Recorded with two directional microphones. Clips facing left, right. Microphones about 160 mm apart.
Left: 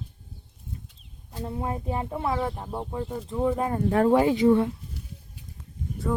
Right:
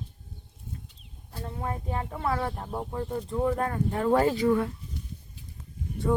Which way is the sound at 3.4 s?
15° left (ahead or behind).